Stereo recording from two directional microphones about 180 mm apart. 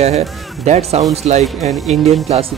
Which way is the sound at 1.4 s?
Centre (ahead or behind).